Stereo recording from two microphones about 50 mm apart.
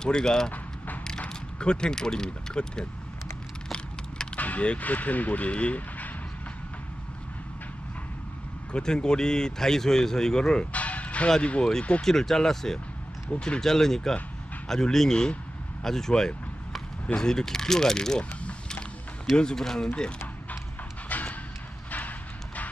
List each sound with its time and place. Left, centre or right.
0.0 s a man's voice: centre
4.4 s speech: left
8.7 s a man's voice: centre
12.0 s a man's voice: centre
19.3 s a man's voice: centre
21.1 s a sound: left